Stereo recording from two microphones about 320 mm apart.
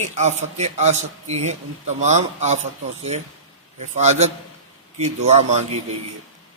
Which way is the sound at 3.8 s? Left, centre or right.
Right.